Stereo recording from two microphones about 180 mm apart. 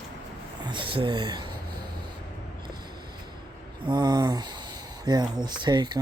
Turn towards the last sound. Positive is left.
turn(degrees=-25)  # may be behind; listen again after turning